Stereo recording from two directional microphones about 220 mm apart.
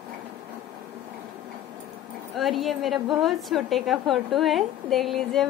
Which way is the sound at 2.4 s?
Centre (ahead or behind).